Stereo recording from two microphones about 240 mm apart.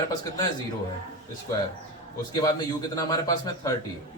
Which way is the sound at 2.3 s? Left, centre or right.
Centre.